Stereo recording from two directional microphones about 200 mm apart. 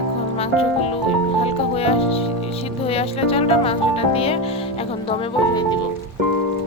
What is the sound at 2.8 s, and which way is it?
Speech, 30° left (ahead or behind).